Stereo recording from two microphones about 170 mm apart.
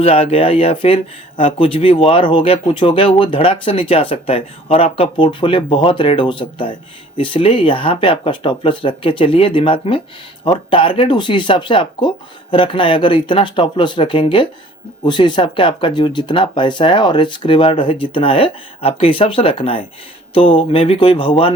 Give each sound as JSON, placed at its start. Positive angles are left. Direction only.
{"t": 0.0, "sound": "speech", "side_deg": 35}